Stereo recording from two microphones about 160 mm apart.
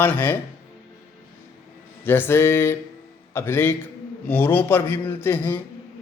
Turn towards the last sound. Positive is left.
turn(degrees=15)  # may be behind; listen again after turning